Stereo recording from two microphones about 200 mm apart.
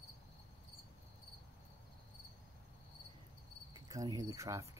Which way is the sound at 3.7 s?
20° right (ahead or behind).